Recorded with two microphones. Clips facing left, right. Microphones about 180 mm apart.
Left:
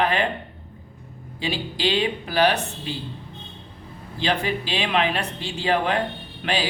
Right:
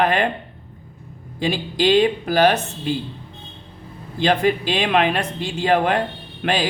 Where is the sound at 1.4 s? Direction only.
45° right (ahead or behind).